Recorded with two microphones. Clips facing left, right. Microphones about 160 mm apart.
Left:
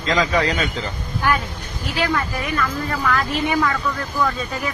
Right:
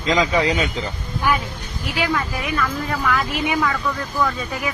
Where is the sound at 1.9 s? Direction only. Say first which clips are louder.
Left 1 dB; 15° right (ahead or behind).